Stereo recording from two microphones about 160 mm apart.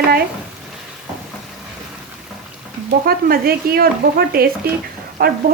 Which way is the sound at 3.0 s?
70° right (ahead or behind).